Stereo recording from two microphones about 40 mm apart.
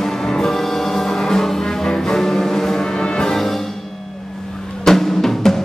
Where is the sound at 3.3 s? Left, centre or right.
Centre.